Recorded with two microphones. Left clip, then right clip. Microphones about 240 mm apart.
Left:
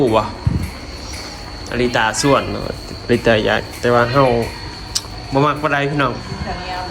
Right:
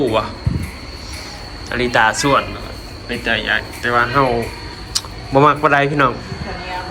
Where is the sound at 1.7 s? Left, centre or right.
Centre.